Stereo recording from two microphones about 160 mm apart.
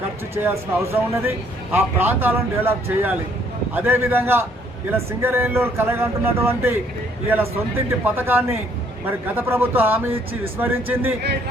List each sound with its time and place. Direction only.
0.4 s speech: 15° right (ahead or behind)